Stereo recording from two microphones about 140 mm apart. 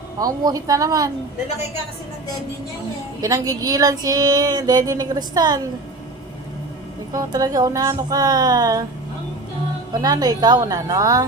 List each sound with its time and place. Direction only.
0.2 s speech: 25° right (ahead or behind)
3.2 s speech: 25° right (ahead or behind)
7.1 s speech: 25° right (ahead or behind)
9.9 s speech: 30° right (ahead or behind)